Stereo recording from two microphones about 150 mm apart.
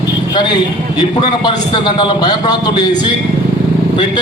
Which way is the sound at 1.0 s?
30° left (ahead or behind).